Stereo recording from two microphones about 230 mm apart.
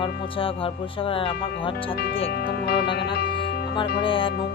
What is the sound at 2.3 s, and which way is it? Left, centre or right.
Speech, left.